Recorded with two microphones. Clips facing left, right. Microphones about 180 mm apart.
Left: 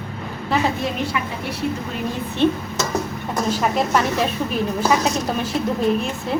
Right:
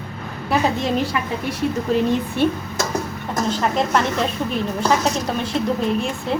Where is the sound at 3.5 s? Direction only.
5° left (ahead or behind).